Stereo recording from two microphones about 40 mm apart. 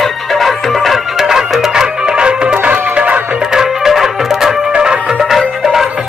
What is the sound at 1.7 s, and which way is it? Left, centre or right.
Music, right.